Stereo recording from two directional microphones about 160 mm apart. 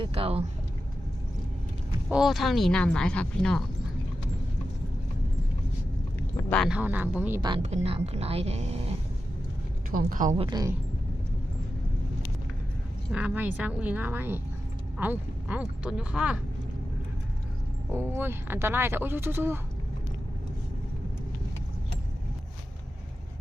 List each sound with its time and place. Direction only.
0.0 s speech: 35° right (ahead or behind)
2.0 s speech: 5° right (ahead or behind)
6.1 s a sound: 15° left (ahead or behind)
6.6 s speech: 5° right (ahead or behind)
7.6 s speech: 45° right (ahead or behind)
9.9 s a woman's voice: 60° right (ahead or behind)
10.3 s speech: 35° right (ahead or behind)
13.1 s speech: 5° right (ahead or behind)
17.9 s speech: 15° right (ahead or behind)